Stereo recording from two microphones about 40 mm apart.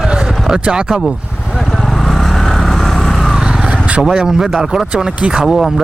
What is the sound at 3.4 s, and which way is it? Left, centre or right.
Vehicle, centre.